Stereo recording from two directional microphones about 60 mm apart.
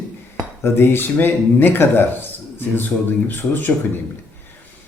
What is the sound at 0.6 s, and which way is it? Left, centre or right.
Speech, left.